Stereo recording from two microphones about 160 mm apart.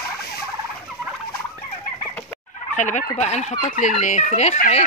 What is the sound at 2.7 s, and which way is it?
Fowl, 50° left (ahead or behind).